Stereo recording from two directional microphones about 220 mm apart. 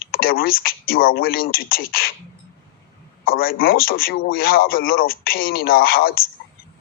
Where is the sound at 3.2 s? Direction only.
40° left (ahead or behind).